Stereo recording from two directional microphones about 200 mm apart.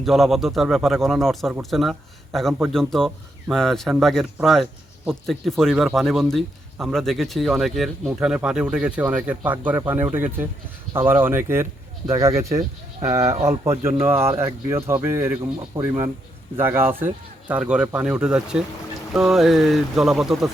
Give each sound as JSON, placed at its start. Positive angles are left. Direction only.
{"t": 0.0, "sound": "speech", "side_deg": 0}